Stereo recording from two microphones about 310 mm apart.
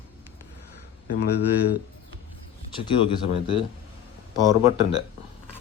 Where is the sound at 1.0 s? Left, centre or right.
Left.